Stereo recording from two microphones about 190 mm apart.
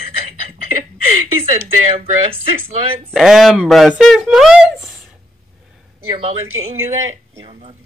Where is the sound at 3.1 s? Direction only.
Centre (ahead or behind).